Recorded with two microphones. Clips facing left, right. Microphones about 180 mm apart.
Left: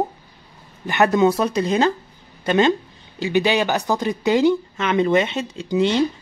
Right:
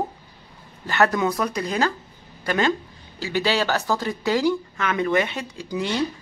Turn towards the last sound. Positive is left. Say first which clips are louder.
# left 6 dB
turn(degrees=25)  # may be behind; listen again after turning